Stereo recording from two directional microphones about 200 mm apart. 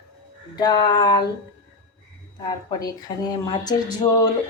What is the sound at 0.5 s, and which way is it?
Speech, 20° left (ahead or behind).